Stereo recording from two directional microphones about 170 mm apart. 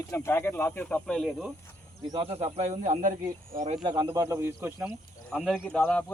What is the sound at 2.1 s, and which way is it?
Speech, 35° right (ahead or behind).